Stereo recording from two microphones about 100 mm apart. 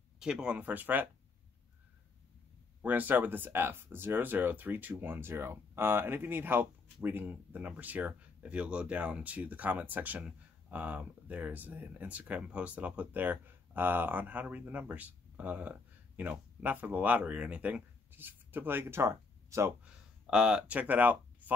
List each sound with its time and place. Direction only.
0.2 s speech: 10° right (ahead or behind)
2.8 s speech: 15° right (ahead or behind)
19.8 s speech: 10° right (ahead or behind)